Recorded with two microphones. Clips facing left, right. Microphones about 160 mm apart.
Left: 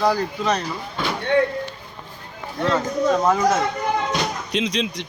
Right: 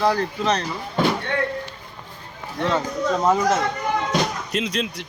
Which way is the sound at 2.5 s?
Centre (ahead or behind).